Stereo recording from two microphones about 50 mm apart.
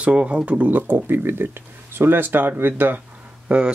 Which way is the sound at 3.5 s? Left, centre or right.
Right.